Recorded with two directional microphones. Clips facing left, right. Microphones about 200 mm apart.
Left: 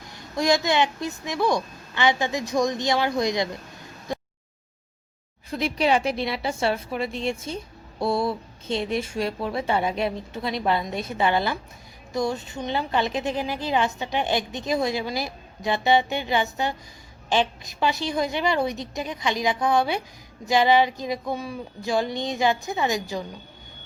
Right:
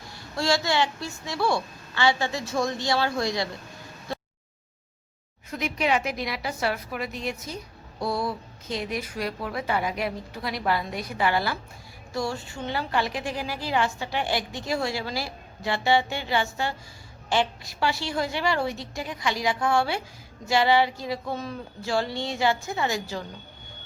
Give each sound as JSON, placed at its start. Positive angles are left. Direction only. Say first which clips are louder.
{"t": 0.1, "sound": "a woman's voice", "louder": "left 3 dB", "side_deg": 20}
{"t": 4.1, "sound": "a sound", "louder": "left 3 dB", "side_deg": 15}
{"t": 5.5, "sound": "a woman's voice", "louder": "left 3 dB", "side_deg": 30}